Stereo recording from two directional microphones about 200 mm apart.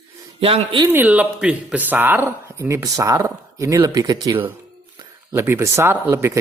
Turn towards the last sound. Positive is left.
turn(degrees=-15)  # may be behind; listen again after turning